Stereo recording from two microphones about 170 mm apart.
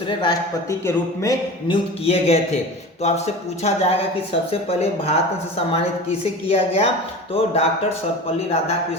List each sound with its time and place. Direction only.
0.2 s speech: 20° left (ahead or behind); by 7.7 s 35° left (ahead or behind)